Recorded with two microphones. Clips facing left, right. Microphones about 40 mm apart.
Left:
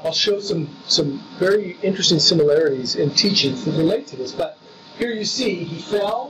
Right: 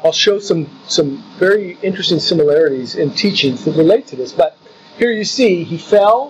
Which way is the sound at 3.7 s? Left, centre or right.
Centre.